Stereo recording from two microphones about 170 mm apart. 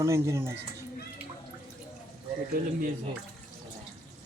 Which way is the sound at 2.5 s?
55° right (ahead or behind).